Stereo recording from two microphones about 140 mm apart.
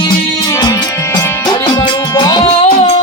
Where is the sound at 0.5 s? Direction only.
25° left (ahead or behind).